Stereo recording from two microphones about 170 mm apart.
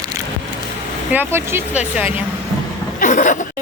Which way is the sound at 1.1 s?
10° right (ahead or behind).